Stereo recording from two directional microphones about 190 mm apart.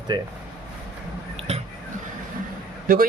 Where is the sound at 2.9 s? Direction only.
50° right (ahead or behind).